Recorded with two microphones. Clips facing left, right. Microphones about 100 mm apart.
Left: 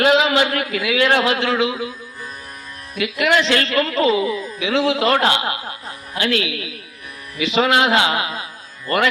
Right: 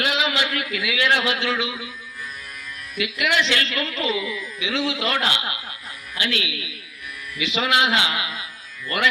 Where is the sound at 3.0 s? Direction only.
40° left (ahead or behind).